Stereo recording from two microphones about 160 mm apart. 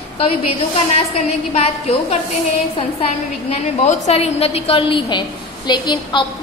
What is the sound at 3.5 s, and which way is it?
A woman's voice, 40° left (ahead or behind).